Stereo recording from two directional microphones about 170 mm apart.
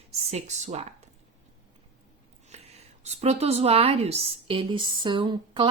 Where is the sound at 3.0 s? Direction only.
40° right (ahead or behind).